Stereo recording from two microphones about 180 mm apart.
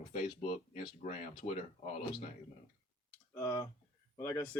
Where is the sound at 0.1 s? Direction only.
35° left (ahead or behind).